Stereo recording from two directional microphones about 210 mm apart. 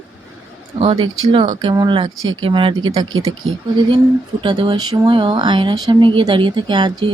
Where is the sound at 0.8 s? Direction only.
25° right (ahead or behind).